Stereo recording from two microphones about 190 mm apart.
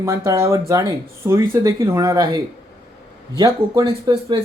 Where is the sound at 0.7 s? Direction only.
15° right (ahead or behind).